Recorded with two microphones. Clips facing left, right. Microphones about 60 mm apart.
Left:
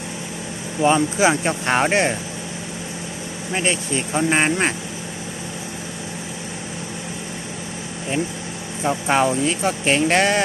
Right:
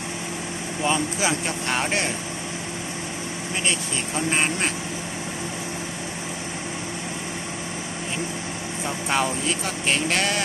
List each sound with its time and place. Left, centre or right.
0.9 s speech: left
3.5 s speech: left
8.8 s speech: left